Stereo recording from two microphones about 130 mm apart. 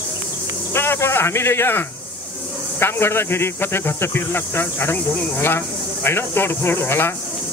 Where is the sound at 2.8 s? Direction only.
20° left (ahead or behind).